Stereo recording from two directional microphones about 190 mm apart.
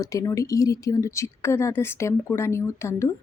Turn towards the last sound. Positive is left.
turn(degrees=15)  # may be behind; listen again after turning